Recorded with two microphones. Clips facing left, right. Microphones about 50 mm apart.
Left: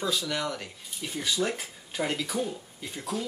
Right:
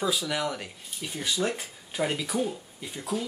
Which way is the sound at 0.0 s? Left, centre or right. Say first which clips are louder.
Right 2 dB; centre.